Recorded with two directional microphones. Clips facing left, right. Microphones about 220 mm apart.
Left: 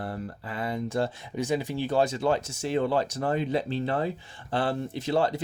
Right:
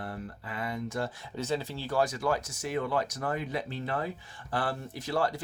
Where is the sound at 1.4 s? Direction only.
15° left (ahead or behind).